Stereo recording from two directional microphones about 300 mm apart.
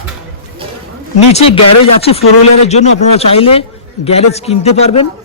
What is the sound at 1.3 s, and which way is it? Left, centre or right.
Speech, left.